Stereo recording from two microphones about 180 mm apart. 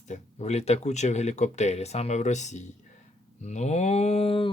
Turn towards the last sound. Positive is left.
turn(degrees=35)  # may be behind; listen again after turning